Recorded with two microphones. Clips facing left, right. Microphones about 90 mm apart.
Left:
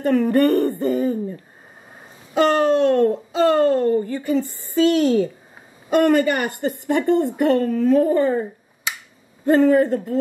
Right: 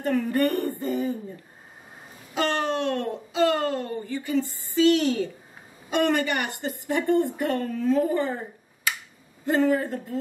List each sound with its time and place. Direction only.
0.0 s a sound: 65° left (ahead or behind)
2.3 s a woman's voice: 40° left (ahead or behind)
6.9 s a woman's voice: 65° left (ahead or behind)
9.5 s a woman's voice: 60° left (ahead or behind)